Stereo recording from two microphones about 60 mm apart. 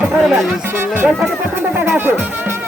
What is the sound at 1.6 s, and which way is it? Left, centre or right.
Speech, right.